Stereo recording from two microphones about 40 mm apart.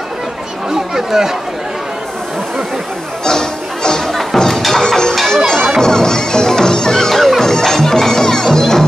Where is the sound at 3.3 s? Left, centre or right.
Centre.